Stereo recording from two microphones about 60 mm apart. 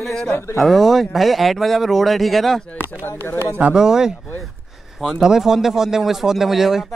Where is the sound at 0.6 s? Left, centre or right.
Centre.